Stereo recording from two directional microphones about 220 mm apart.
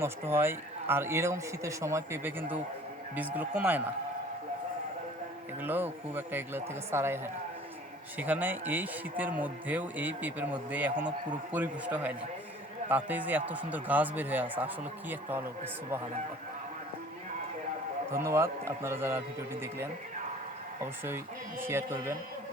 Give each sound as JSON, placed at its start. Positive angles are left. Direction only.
{"t": 0.0, "sound": "speech", "side_deg": -10}
{"t": 5.6, "sound": "speech", "side_deg": -10}
{"t": 8.2, "sound": "speech", "side_deg": -10}
{"t": 18.1, "sound": "speech", "side_deg": -10}
{"t": 21.6, "sound": "speech", "side_deg": -10}